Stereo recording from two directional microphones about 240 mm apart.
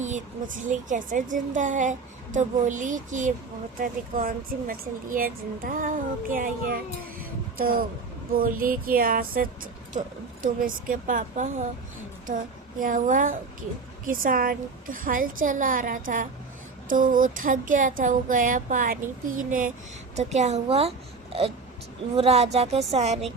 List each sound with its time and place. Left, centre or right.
0.0 s a woman's voice: right
7.2 s a sound: right
8.3 s a woman's voice: right
12.8 s a woman's voice: right
22.1 s a woman's voice: right